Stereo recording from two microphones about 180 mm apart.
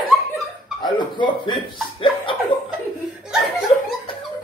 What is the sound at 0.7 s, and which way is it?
Speech, 25° left (ahead or behind).